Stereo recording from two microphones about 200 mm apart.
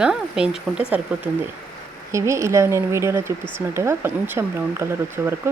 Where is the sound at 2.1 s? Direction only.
15° right (ahead or behind).